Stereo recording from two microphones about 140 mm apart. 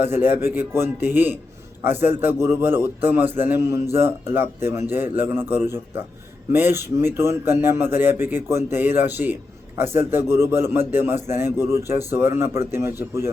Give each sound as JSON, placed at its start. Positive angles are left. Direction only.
{"t": 0.0, "sound": "a man's voice", "side_deg": -15}